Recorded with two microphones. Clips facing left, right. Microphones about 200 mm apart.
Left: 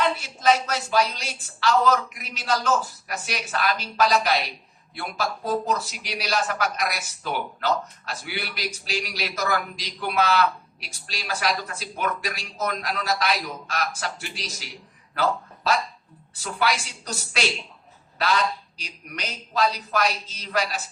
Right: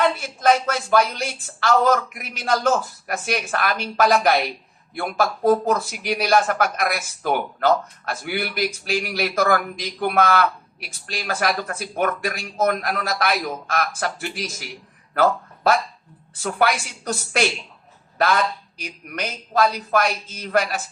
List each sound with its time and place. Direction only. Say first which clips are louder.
0.2 s a man's voice: right 3 dB; 55° right (ahead or behind)